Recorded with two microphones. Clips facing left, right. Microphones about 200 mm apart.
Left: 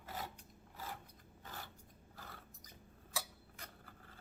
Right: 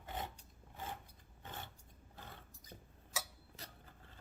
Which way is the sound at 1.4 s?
25° right (ahead or behind).